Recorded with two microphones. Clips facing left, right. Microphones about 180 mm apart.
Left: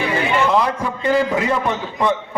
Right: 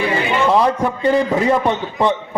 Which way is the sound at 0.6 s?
35° right (ahead or behind).